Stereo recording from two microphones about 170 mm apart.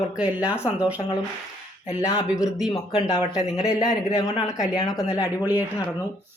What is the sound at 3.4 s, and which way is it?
Speech, 35° left (ahead or behind).